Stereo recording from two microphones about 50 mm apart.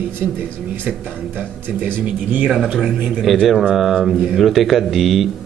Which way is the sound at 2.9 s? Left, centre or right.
Right.